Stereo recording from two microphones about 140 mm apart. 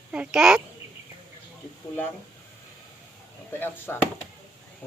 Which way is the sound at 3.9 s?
15° left (ahead or behind).